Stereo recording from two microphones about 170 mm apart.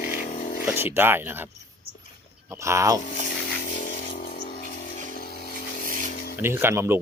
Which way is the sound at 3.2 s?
50° left (ahead or behind).